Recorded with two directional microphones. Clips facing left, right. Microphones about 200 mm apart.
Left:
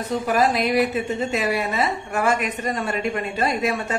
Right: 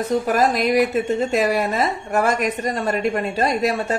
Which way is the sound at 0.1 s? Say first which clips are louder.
Right 1 dB; 45° right (ahead or behind).